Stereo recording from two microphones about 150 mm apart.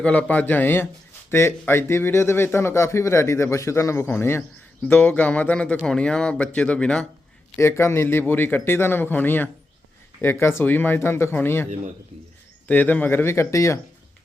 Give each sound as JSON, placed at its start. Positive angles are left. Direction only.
{"t": 0.0, "sound": "a man's voice", "side_deg": 10}
{"t": 7.6, "sound": "a man's voice", "side_deg": 15}